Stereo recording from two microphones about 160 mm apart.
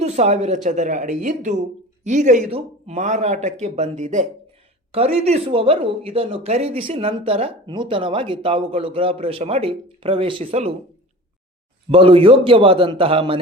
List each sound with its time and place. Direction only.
0.0 s a man's voice: 45° right (ahead or behind)
11.9 s speech: 35° right (ahead or behind)